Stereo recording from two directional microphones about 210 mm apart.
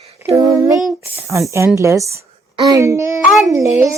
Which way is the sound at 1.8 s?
15° right (ahead or behind).